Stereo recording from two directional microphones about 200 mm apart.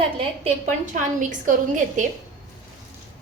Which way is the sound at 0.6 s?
40° right (ahead or behind).